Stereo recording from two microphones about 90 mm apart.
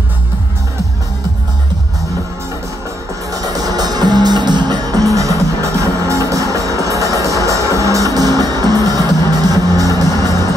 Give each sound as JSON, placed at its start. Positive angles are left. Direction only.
{"t": 3.3, "sound": "music", "side_deg": -45}